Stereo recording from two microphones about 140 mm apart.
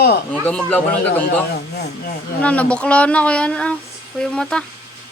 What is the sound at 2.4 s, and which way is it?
Speech, 10° left (ahead or behind).